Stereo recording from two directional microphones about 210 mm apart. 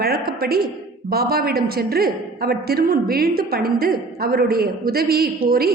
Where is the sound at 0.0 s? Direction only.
45° right (ahead or behind).